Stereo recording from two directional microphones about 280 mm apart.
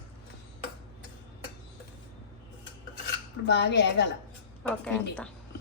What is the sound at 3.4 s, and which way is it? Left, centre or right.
Speech, left.